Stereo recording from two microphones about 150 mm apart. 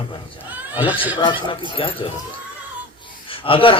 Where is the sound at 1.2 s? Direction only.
35° left (ahead or behind).